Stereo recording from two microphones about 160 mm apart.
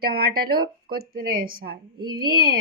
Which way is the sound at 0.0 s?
75° right (ahead or behind).